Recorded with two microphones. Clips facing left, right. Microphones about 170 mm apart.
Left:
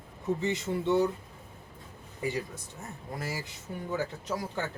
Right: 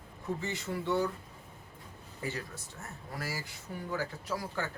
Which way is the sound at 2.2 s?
15° left (ahead or behind).